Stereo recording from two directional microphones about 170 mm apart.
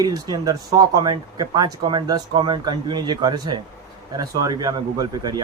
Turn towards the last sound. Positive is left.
turn(degrees=-25)  # may be behind; listen again after turning